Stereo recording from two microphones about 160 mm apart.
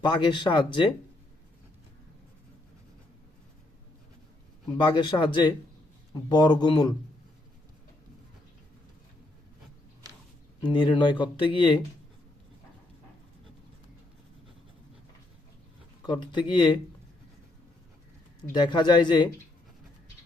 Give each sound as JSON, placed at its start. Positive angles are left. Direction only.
{"t": 0.0, "sound": "speech", "side_deg": 30}
{"t": 4.8, "sound": "speech", "side_deg": 30}
{"t": 10.6, "sound": "speech", "side_deg": 30}
{"t": 16.2, "sound": "speech", "side_deg": 30}
{"t": 18.4, "sound": "speech", "side_deg": 25}